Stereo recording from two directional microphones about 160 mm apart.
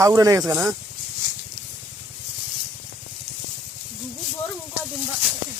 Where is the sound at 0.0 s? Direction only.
20° right (ahead or behind).